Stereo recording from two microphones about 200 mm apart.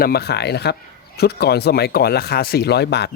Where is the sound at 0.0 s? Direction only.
50° left (ahead or behind).